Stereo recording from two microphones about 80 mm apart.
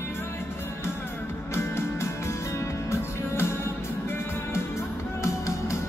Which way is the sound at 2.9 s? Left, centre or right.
Left.